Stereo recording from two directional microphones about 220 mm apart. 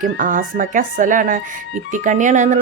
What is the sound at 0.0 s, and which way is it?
Speech, 40° right (ahead or behind).